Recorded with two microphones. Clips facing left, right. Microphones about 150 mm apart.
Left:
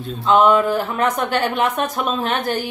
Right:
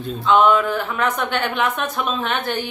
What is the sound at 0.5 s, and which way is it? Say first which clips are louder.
Speech: left 2 dB; 35° left (ahead or behind).